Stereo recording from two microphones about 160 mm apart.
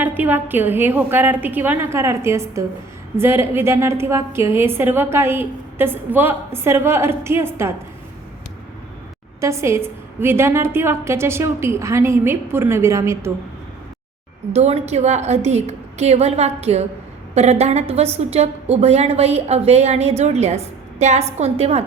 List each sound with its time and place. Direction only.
0.0 s a woman's voice: 10° right (ahead or behind)
9.4 s a woman's voice: 15° right (ahead or behind)
14.5 s a woman's voice: 40° right (ahead or behind)